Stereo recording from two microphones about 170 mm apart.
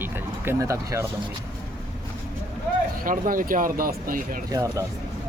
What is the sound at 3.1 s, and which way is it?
Speech, 55° right (ahead or behind).